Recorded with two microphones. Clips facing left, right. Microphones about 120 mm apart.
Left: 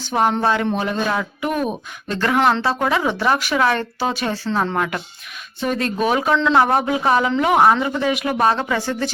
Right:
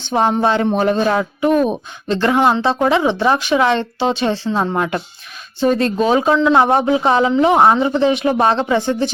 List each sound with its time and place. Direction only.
0.0 s speech: 25° right (ahead or behind)